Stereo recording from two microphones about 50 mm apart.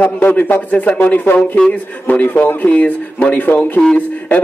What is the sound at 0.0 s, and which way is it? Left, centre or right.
A man's voice, left.